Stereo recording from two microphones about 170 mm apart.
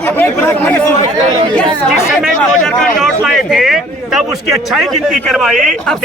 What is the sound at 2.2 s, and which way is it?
A man's voice, centre (ahead or behind).